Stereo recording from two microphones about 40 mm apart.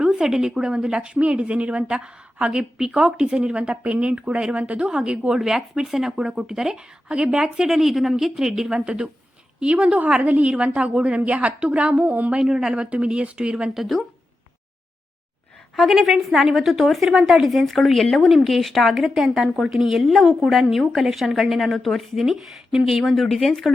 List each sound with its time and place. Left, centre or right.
0.1 s a woman's voice: centre
1.1 s a woman's voice: right
4.9 s a woman's voice: right
5.4 s a woman's voice: centre; by 12.0 s right
12.0 s speech: right
12.3 s a woman's voice: centre
12.8 s a woman's voice: right
13.7 s a woman's voice: centre
15.9 s a woman's voice: centre